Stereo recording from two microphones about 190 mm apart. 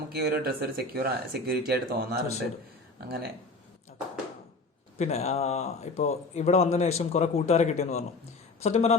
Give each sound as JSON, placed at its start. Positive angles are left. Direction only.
{"t": 0.1, "sound": "speech", "side_deg": -55}
{"t": 4.9, "sound": "speech", "side_deg": 35}